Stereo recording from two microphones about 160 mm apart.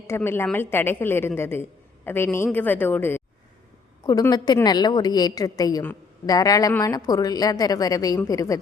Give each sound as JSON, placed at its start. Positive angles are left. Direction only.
{"t": 0.2, "sound": "a woman's voice", "side_deg": 10}